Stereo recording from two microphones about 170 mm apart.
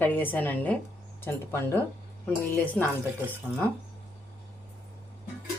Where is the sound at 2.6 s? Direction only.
10° left (ahead or behind).